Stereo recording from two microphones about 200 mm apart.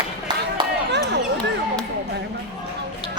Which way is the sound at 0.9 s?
60° right (ahead or behind).